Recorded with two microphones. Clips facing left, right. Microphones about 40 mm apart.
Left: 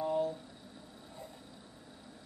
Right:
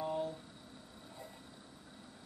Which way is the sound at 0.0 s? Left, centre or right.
Centre.